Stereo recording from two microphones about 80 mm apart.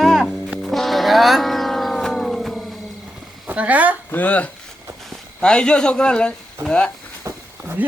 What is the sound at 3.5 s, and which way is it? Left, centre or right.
Speech, centre.